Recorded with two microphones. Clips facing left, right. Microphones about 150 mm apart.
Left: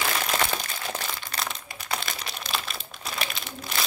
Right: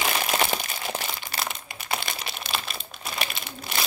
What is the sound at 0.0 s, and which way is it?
Crumpling, 15° right (ahead or behind).